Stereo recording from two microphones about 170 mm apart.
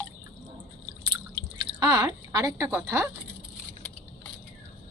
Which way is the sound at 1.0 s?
25° right (ahead or behind).